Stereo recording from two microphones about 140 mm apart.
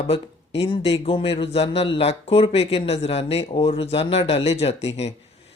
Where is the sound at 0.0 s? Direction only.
45° left (ahead or behind).